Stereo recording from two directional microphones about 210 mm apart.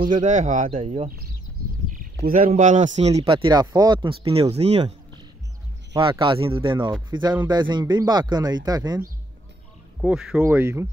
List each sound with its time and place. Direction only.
0.2 s speech: 35° right (ahead or behind)
2.2 s speech: 35° right (ahead or behind)
5.9 s speech: 25° right (ahead or behind)
9.9 s speech: 5° right (ahead or behind)